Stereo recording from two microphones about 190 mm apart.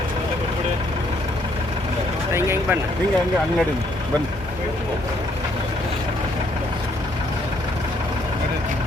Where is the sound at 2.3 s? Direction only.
15° right (ahead or behind).